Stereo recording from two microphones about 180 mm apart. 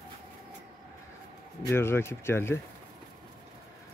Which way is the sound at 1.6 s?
15° left (ahead or behind).